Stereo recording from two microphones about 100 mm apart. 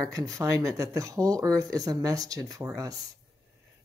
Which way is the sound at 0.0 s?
35° right (ahead or behind).